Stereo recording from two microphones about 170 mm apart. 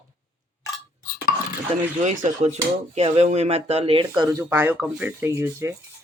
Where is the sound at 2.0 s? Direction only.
45° right (ahead or behind); by 4.3 s 25° right (ahead or behind).